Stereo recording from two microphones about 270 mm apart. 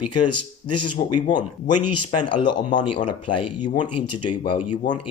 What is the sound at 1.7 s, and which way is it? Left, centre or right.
Speech, left.